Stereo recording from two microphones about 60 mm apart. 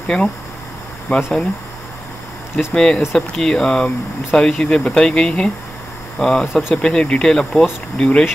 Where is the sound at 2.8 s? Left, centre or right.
Centre.